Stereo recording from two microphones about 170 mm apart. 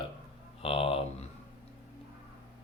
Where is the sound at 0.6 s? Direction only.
35° left (ahead or behind).